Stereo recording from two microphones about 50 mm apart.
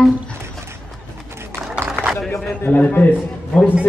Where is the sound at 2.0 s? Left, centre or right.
Centre.